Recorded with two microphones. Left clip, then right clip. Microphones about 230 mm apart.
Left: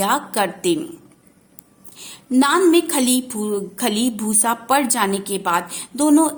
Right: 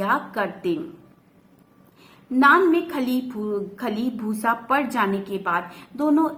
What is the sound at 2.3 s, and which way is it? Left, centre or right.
A woman's voice, left.